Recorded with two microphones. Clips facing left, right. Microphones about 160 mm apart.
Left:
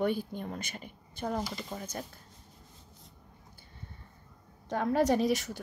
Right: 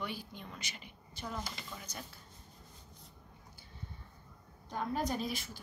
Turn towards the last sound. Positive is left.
turn(degrees=75)  # may be behind; listen again after turning